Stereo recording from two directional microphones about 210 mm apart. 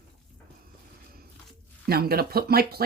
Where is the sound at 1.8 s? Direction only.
45° right (ahead or behind).